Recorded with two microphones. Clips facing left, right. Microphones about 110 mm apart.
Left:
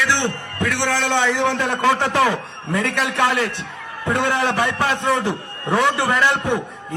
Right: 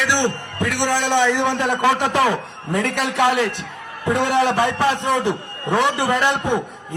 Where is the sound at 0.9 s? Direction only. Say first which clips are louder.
Right 3 dB; 20° right (ahead or behind).